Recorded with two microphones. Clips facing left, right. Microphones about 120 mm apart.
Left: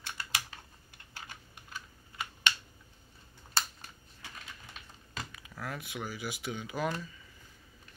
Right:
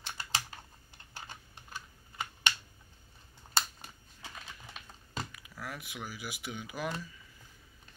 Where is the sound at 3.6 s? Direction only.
20° right (ahead or behind).